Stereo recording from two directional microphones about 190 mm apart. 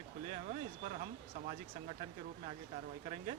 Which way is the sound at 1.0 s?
35° right (ahead or behind).